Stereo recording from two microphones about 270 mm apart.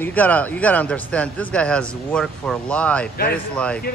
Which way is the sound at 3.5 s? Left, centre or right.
Centre.